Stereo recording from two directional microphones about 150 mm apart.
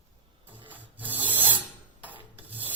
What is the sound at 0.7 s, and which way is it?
Rub, 10° right (ahead or behind).